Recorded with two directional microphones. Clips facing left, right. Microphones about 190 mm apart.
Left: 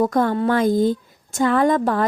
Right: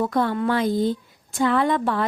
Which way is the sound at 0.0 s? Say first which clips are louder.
Left 4 dB; 45° left (ahead or behind).